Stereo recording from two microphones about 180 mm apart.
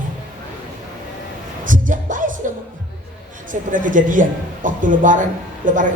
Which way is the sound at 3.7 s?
45° right (ahead or behind).